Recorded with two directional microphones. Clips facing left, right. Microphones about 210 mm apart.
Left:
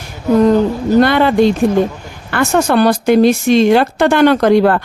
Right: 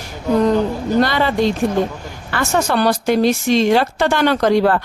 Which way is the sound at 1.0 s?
55° left (ahead or behind).